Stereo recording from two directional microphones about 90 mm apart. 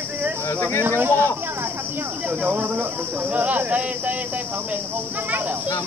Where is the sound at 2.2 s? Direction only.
20° right (ahead or behind).